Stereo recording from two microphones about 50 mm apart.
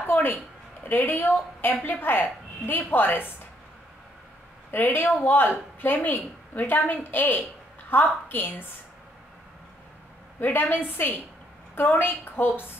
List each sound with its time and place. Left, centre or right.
0.0 s a sound: left
0.8 s a woman's voice: left
4.6 s speech: left
10.4 s a woman's voice: left